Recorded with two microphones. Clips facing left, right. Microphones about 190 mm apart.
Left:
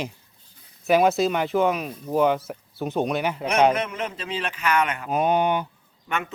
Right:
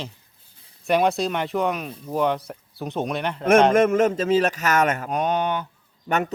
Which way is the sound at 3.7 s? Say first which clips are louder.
Right 11 dB; 45° right (ahead or behind).